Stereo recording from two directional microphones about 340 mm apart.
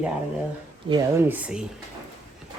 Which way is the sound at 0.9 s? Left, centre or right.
Centre.